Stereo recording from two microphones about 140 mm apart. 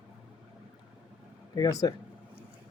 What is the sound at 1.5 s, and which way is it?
Speech, 25° left (ahead or behind).